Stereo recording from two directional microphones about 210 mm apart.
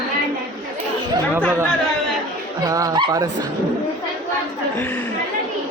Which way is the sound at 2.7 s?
15° right (ahead or behind).